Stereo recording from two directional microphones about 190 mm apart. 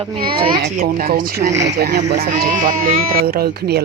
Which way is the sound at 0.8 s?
50° right (ahead or behind).